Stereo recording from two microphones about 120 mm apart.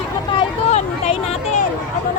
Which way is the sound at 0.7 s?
65° left (ahead or behind).